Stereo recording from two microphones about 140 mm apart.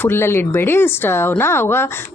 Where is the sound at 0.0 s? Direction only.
15° left (ahead or behind).